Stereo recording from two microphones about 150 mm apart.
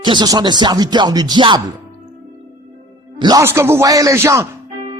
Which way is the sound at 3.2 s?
25° right (ahead or behind).